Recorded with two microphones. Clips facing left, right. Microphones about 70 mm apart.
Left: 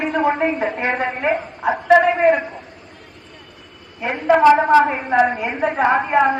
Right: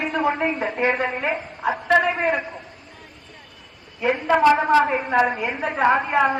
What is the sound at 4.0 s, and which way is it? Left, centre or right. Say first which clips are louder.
A woman's voice: left 4 dB; centre.